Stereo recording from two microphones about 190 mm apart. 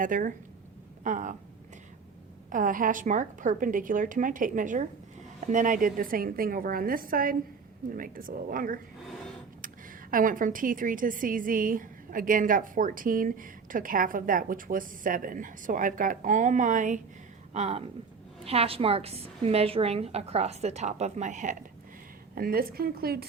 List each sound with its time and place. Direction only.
0.0 s a woman's voice: 45° right (ahead or behind)
2.5 s a woman's voice: 45° right (ahead or behind)
10.1 s a woman's voice: 45° right (ahead or behind)
22.4 s a woman's voice: 50° right (ahead or behind)